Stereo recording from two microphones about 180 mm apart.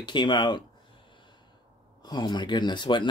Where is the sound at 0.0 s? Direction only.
25° left (ahead or behind).